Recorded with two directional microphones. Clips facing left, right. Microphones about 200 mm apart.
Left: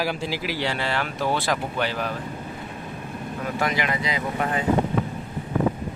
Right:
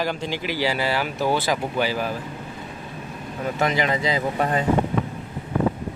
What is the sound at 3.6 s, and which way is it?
Speech, 25° right (ahead or behind).